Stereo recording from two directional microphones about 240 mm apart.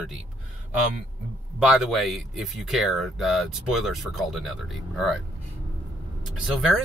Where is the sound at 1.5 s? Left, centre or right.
Centre.